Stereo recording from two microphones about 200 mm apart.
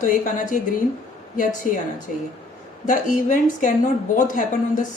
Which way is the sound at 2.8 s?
40° left (ahead or behind).